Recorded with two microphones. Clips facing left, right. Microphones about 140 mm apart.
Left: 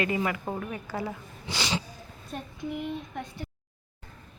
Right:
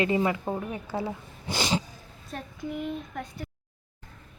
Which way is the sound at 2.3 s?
Centre (ahead or behind).